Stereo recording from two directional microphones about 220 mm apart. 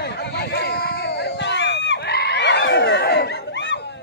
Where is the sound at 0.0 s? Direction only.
50° left (ahead or behind).